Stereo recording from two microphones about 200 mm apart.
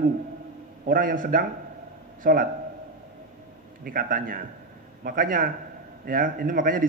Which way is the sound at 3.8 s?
45° right (ahead or behind).